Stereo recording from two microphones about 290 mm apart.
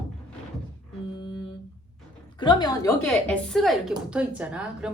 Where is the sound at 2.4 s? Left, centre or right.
Centre.